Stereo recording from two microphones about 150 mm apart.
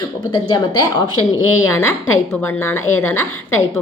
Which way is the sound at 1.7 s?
15° left (ahead or behind).